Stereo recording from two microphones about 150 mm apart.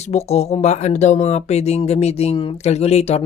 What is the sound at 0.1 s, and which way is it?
Speech, 45° left (ahead or behind).